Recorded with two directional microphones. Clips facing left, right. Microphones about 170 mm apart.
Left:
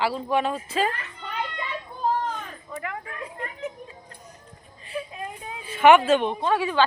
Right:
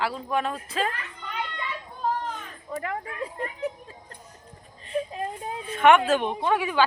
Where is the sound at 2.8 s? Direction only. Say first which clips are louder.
Right 2 dB; 35° right (ahead or behind).